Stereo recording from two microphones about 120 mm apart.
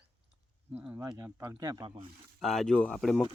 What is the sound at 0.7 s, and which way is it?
Speech, 15° right (ahead or behind).